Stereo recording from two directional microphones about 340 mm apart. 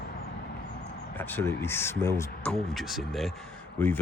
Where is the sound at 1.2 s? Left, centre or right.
Centre.